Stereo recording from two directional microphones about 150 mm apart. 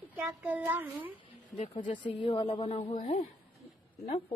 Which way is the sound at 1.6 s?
55° left (ahead or behind).